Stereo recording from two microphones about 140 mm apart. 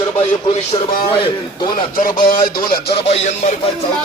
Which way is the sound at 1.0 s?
35° left (ahead or behind).